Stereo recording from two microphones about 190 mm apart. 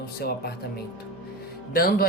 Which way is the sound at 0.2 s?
55° left (ahead or behind).